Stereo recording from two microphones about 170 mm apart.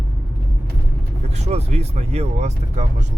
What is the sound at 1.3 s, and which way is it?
Speech, 40° right (ahead or behind).